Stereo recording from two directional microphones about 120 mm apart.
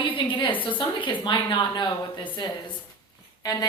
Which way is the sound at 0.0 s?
45° left (ahead or behind).